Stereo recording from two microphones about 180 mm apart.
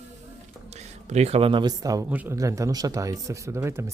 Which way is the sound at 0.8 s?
35° right (ahead or behind).